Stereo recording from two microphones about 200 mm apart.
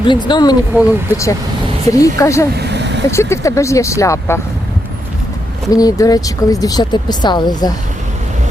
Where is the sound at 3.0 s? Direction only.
15° left (ahead or behind).